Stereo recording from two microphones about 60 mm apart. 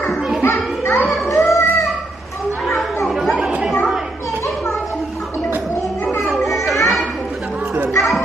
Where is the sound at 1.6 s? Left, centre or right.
Left.